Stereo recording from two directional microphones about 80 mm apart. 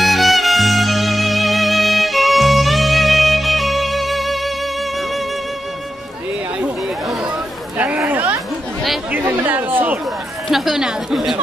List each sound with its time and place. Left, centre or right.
0.0 s music: centre
7.7 s chatter: centre
9.1 s chatter: right
10.5 s a sound: centre